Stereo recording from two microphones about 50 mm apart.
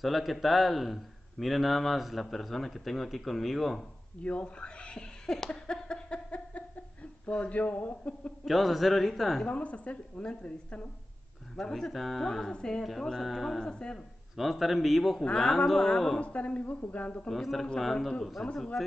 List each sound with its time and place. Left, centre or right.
0.0 s a man's voice: centre
4.2 s laughter: left
7.2 s a woman's voice: left
8.5 s a man's voice: centre
9.5 s a woman's voice: left
11.5 s a man's voice: centre
13.7 s speech: centre
14.3 s a man's voice: centre
15.3 s speech: centre
16.2 s a woman's voice: left
17.3 s a man's voice: centre
18.4 s speech: centre